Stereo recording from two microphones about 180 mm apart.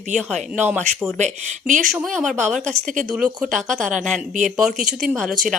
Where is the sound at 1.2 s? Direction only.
45° right (ahead or behind).